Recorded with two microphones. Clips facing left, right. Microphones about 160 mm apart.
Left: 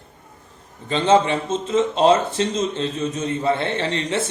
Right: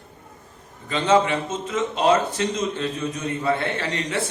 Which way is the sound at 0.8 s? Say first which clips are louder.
Left 2 dB; 30° left (ahead or behind).